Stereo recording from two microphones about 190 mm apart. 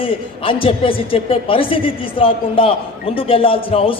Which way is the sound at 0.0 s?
30° left (ahead or behind).